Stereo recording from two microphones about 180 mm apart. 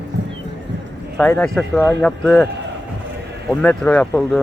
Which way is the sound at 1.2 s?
5° left (ahead or behind).